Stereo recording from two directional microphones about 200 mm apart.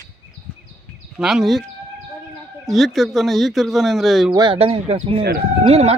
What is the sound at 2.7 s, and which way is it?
Speech, centre (ahead or behind).